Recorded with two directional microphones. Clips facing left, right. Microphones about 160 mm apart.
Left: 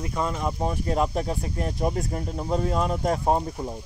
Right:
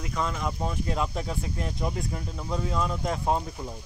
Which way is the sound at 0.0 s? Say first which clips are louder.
Left 3 dB; 30° left (ahead or behind).